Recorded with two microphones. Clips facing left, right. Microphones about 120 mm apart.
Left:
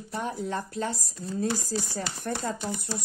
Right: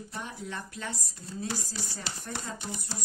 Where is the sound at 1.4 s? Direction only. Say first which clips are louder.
Left 7 dB; 50° left (ahead or behind).